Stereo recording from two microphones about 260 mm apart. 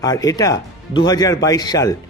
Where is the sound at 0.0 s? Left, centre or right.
Centre.